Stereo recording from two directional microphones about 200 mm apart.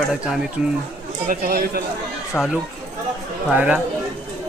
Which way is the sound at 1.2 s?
45° right (ahead or behind).